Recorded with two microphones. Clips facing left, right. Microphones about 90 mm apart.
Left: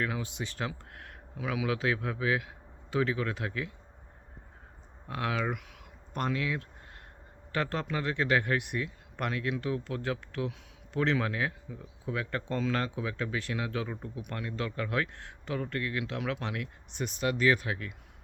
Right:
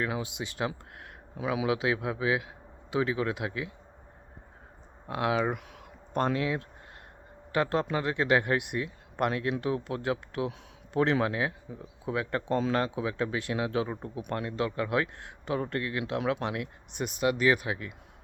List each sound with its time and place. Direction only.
0.0 s speech: 15° right (ahead or behind)
5.0 s speech: 20° right (ahead or behind)
7.5 s speech: 15° right (ahead or behind)